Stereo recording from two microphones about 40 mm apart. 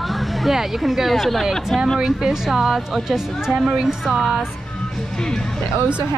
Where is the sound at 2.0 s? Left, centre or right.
Centre.